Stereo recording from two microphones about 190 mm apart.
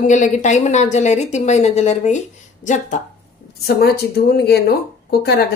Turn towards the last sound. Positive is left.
turn(degrees=60)  # may be behind; listen again after turning